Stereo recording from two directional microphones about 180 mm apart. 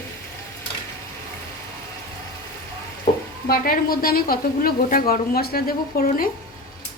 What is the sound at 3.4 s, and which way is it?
A woman's voice, 55° left (ahead or behind).